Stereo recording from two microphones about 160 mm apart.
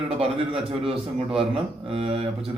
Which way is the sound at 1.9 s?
35° right (ahead or behind).